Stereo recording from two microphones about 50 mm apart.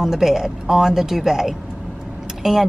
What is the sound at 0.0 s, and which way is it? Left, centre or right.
A woman's voice, centre.